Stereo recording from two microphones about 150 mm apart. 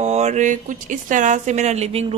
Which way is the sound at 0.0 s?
50° right (ahead or behind).